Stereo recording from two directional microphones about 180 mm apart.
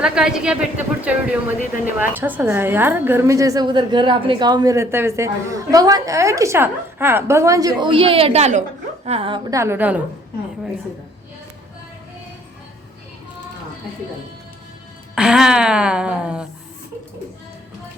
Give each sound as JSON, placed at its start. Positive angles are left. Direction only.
{"t": 0.0, "sound": "a woman's voice", "side_deg": -5}
{"t": 9.5, "sound": "speech", "side_deg": -15}
{"t": 15.1, "sound": "speech", "side_deg": -5}